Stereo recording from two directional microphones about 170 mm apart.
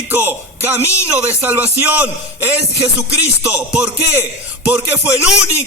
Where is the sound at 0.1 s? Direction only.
10° right (ahead or behind).